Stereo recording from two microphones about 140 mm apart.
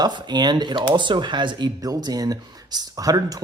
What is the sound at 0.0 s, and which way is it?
Speech, 30° right (ahead or behind).